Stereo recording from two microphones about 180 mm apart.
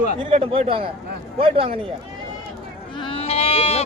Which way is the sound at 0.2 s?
30° right (ahead or behind).